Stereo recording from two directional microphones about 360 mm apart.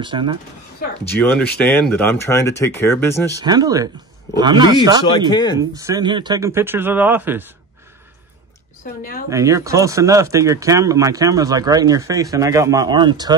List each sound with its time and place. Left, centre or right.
0.0 s speech: centre
0.8 s a sound: left
1.3 s speech: centre
3.3 s speech: centre
5.3 s speech: centre
5.6 s speech: centre
9.3 s speech: centre